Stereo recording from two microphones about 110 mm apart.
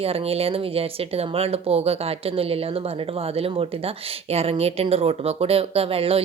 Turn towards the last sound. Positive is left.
turn(degrees=-60)  # may be behind; listen again after turning